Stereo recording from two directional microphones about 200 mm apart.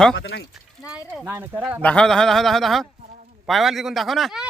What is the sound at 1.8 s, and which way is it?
Speech, 5° left (ahead or behind).